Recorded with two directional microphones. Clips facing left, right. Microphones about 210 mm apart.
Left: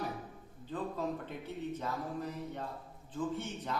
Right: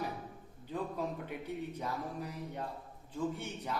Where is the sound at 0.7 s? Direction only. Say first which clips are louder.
Left 1 dB; 10° right (ahead or behind).